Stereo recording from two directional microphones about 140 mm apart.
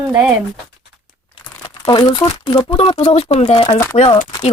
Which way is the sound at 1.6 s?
35° left (ahead or behind).